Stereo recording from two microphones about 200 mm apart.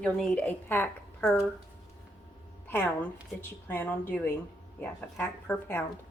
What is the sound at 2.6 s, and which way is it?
A woman's voice, 10° left (ahead or behind).